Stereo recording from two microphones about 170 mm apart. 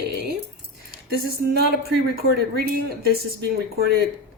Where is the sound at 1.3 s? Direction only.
65° right (ahead or behind).